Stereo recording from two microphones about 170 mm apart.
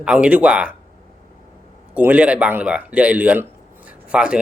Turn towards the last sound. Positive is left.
turn(degrees=-5)  # may be behind; listen again after turning